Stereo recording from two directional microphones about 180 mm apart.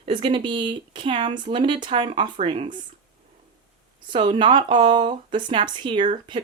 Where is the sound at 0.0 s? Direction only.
25° right (ahead or behind).